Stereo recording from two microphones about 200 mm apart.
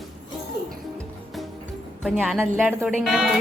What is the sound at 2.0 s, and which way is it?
A woman's voice, centre (ahead or behind).